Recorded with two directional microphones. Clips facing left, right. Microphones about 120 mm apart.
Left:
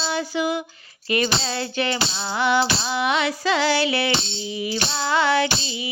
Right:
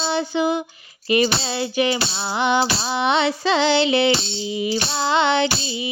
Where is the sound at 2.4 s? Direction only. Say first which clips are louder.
Right 1 dB; 20° right (ahead or behind).